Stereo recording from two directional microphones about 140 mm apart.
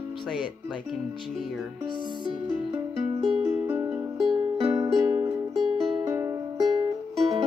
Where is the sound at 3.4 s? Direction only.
20° right (ahead or behind).